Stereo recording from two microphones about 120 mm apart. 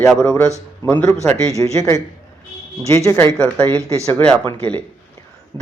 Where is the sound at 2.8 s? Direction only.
25° left (ahead or behind).